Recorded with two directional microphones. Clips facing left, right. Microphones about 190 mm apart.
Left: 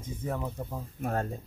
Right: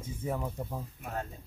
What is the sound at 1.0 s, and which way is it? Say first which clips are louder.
Speech: left 9 dB; 50° left (ahead or behind).